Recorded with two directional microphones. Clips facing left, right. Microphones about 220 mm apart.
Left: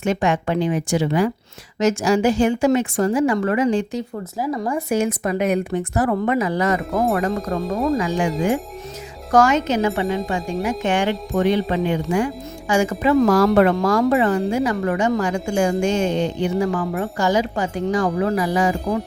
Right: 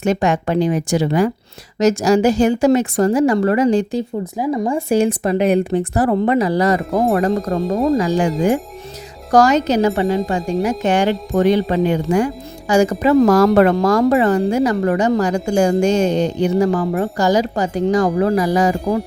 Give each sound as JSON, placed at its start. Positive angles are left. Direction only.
{"t": 0.0, "sound": "speech", "side_deg": -40}
{"t": 4.4, "sound": "speech", "side_deg": -20}
{"t": 9.3, "sound": "speech", "side_deg": -35}